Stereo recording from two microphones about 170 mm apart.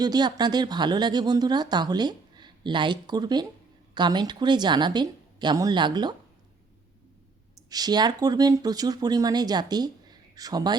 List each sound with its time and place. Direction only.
0.0 s speech: 25° right (ahead or behind)
7.7 s speech: 25° right (ahead or behind)